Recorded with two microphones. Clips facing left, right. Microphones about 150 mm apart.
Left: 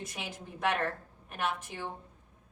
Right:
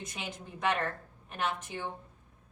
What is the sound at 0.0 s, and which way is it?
A woman's voice, 5° left (ahead or behind).